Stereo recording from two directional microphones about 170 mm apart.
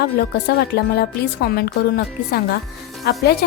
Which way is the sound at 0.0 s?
70° left (ahead or behind).